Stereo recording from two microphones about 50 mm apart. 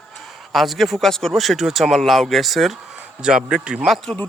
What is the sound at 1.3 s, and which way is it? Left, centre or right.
Speech, centre.